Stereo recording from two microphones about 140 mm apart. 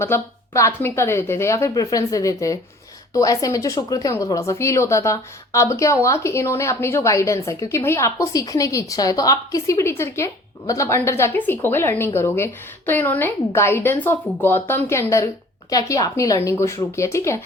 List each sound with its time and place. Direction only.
0.0 s a woman's voice: 20° left (ahead or behind)